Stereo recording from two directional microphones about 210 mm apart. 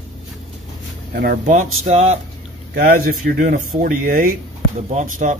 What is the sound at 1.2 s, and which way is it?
Speech, 40° right (ahead or behind).